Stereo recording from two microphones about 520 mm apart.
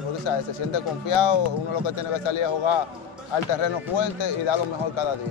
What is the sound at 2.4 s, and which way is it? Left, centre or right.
Speech, left.